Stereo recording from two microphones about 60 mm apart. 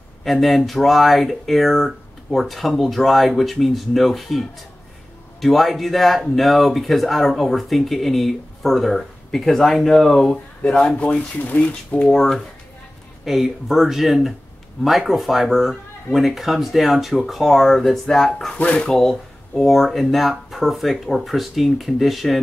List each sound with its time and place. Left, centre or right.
0.2 s speech: centre; by 12.1 s left
12.1 s speech: centre